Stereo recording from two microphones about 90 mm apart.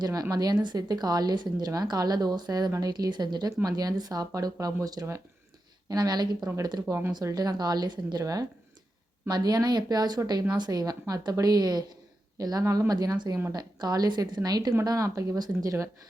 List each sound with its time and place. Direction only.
0.0 s a woman's voice: 45° right (ahead or behind)